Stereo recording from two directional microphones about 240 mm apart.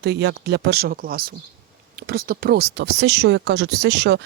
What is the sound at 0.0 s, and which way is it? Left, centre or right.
Speech, right.